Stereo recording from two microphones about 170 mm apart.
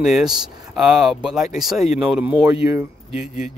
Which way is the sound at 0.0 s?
5° right (ahead or behind).